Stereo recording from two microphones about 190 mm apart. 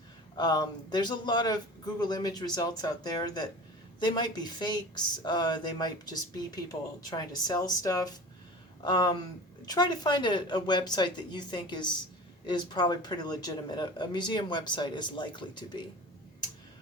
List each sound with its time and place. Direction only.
0.3 s speech: 20° left (ahead or behind)